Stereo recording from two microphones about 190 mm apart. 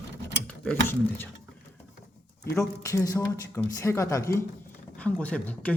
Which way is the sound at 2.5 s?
15° left (ahead or behind).